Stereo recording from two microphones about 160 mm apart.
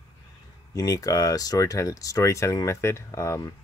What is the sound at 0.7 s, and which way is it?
Speech, 20° left (ahead or behind).